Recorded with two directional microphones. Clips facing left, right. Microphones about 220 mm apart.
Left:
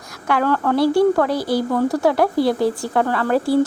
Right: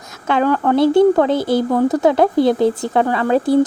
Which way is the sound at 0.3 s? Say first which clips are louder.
Right 3 dB; 20° right (ahead or behind).